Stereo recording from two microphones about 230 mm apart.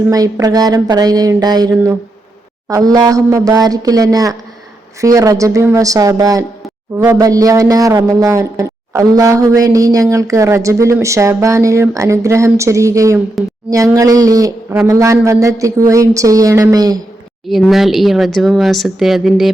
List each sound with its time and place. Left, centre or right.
0.1 s a man's voice: centre
17.5 s speech: centre